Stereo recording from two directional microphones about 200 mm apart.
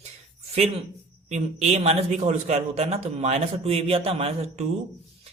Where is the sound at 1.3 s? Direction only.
35° right (ahead or behind).